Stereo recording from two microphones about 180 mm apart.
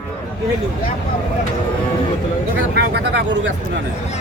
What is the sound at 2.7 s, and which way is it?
Speech, 70° right (ahead or behind).